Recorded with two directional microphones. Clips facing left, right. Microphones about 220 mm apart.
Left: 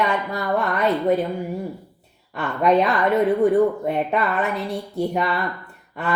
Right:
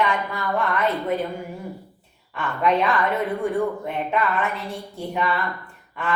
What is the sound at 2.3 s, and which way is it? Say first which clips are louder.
A woman's voice: left 4 dB; 40° left (ahead or behind).